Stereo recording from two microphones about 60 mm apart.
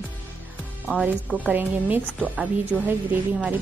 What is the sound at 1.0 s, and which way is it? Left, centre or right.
A woman's voice, right.